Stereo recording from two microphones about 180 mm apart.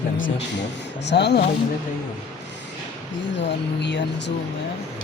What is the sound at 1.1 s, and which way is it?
Speech, 70° left (ahead or behind).